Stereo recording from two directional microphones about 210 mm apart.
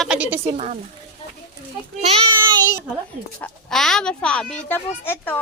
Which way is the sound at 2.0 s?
30° right (ahead or behind).